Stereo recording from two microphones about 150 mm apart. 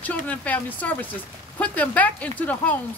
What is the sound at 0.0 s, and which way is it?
Speech, 10° left (ahead or behind).